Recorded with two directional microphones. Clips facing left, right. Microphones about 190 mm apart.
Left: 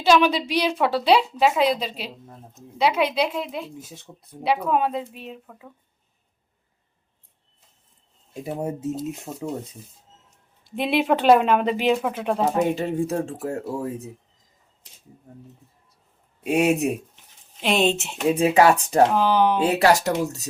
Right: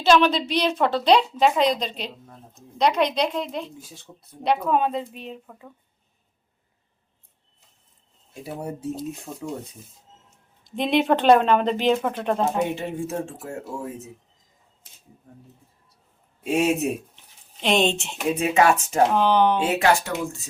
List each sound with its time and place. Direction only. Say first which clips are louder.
0.0 s a woman's voice: even; 10° left (ahead or behind)
3.8 s speech: left 4 dB; 20° left (ahead or behind)
4.4 s speech: even; 5° left (ahead or behind)
8.3 s speech: left 4 dB; 20° left (ahead or behind)
10.6 s a woman's voice: right 1 dB; 5° left (ahead or behind)
12.7 s speech: left 4 dB; 40° left (ahead or behind)
16.4 s a woman's voice: left 2 dB; 10° left (ahead or behind)
18.3 s speech: left 2 dB; 30° left (ahead or behind)
19.1 s speech: even; 5° left (ahead or behind)
19.6 s speech: left 3 dB; 35° left (ahead or behind)